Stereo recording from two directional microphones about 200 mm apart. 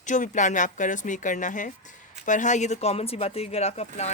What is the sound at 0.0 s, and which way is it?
Speech, 40° left (ahead or behind).